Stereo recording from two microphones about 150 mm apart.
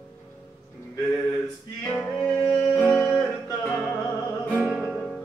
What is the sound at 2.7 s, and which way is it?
Music, 5° left (ahead or behind).